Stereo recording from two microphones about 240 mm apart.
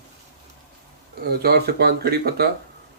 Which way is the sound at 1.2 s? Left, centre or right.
Right.